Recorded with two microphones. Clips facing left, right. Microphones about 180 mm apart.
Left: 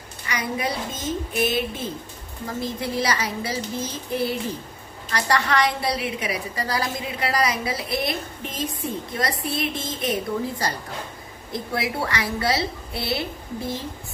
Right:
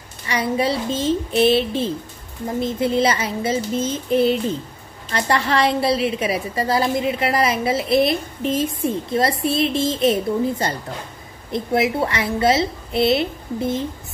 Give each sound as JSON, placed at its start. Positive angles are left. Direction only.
{"t": 0.3, "sound": "a woman's voice", "side_deg": -30}